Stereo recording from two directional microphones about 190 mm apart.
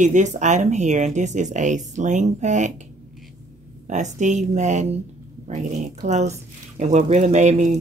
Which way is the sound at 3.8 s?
40° right (ahead or behind).